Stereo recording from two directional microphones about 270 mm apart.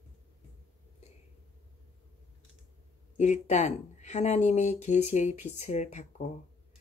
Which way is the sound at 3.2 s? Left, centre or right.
Left.